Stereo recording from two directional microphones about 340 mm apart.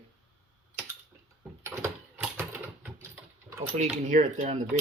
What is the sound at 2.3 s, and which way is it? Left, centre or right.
Typing, centre.